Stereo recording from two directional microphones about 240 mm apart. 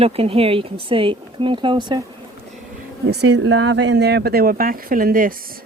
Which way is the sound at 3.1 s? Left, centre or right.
Right.